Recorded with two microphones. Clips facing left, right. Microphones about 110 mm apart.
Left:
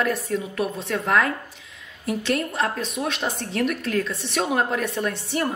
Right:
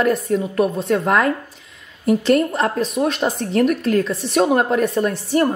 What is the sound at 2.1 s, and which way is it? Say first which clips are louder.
A woman's voice: right 9 dB; 35° right (ahead or behind).